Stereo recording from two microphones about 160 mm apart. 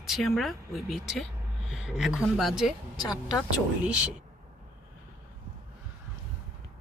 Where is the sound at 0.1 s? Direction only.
Centre (ahead or behind).